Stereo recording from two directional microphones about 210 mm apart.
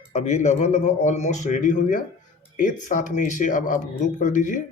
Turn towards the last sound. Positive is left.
turn(degrees=35)  # may be behind; listen again after turning